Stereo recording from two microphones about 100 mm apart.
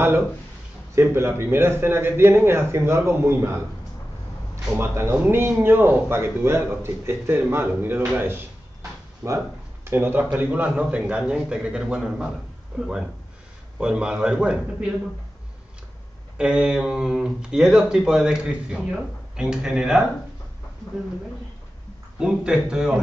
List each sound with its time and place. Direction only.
0.9 s speech: 25° right (ahead or behind)
4.7 s speech: 25° right (ahead or behind)
9.2 s speech: centre (ahead or behind)
9.8 s speech: 20° right (ahead or behind)
16.3 s speech: 10° right (ahead or behind)
22.2 s speech: 5° right (ahead or behind)